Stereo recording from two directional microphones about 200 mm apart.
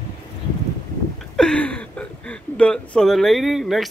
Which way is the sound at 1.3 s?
5° left (ahead or behind).